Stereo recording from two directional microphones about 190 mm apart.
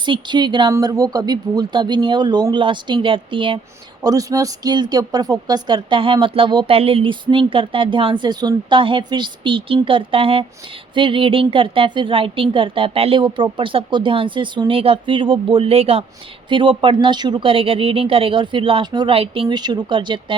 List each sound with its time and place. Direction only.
0.0 s speech: 25° right (ahead or behind)